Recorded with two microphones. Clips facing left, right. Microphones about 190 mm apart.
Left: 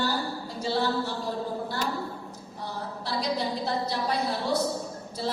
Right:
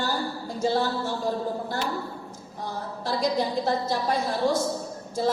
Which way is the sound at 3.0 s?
45° right (ahead or behind).